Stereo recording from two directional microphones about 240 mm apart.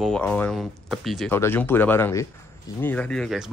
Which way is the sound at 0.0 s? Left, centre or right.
Centre.